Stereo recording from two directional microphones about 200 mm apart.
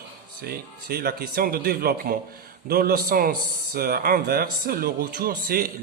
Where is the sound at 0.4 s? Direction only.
50° right (ahead or behind).